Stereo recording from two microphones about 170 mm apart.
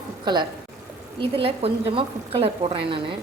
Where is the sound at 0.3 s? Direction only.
25° right (ahead or behind).